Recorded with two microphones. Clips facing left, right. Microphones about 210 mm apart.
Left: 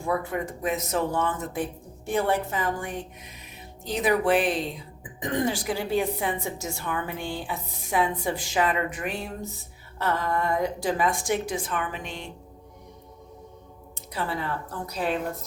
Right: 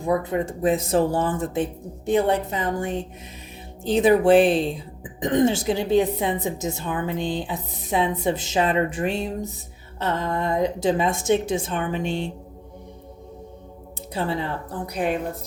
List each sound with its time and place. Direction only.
0.0 s a woman's voice: 20° right (ahead or behind)
14.1 s a woman's voice: 25° right (ahead or behind)
14.9 s a woman's voice: 15° right (ahead or behind)